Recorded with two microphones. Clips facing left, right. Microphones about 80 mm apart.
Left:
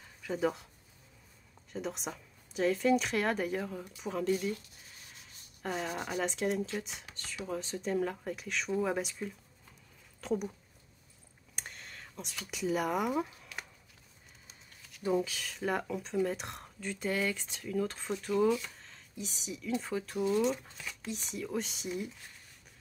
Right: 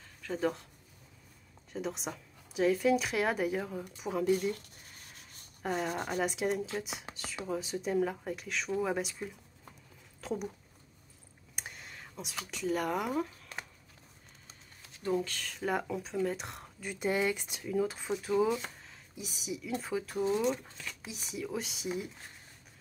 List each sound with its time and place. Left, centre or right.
0.0 s a sound: centre
1.7 s speech: centre
5.6 s speech: centre
7.1 s speech: right
7.4 s speech: centre
11.5 s a sound: centre
12.4 s speech: centre
15.0 s speech: centre
16.9 s speech: centre
18.8 s a sound: centre
19.8 s speech: centre